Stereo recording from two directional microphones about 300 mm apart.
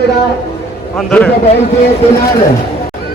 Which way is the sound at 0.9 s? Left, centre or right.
Centre.